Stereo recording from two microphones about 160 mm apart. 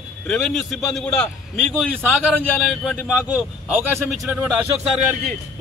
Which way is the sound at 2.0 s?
5° right (ahead or behind).